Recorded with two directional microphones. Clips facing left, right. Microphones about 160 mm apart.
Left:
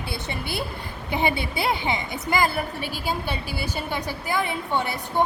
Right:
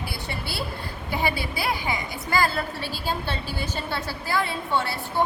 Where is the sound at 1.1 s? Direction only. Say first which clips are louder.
Left 2 dB; 20° left (ahead or behind).